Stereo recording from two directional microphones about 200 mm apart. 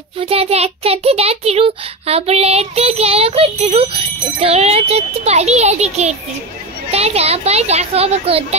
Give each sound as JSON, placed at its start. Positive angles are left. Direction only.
{"t": 0.2, "sound": "a child's voice", "side_deg": -30}